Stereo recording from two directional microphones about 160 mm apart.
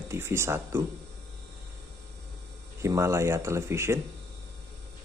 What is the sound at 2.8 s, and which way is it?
Speech, 15° right (ahead or behind).